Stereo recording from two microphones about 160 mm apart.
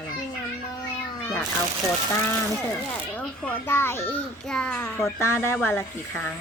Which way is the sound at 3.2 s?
10° left (ahead or behind).